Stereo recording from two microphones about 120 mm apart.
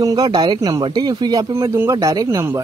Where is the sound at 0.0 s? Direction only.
35° right (ahead or behind).